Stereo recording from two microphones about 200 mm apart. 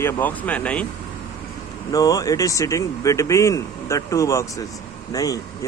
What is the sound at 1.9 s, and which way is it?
Speech, 15° left (ahead or behind).